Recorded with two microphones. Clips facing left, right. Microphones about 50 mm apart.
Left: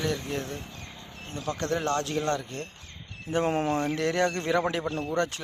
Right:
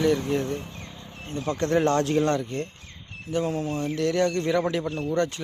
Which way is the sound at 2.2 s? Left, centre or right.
Centre.